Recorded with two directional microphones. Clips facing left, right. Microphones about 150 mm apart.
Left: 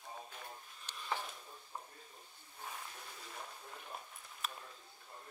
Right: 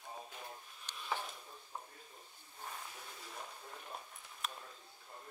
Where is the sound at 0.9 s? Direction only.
Centre (ahead or behind).